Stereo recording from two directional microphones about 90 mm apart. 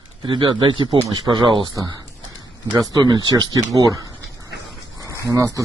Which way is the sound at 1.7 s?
40° right (ahead or behind).